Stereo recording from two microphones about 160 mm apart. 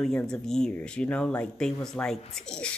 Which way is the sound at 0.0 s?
5° left (ahead or behind).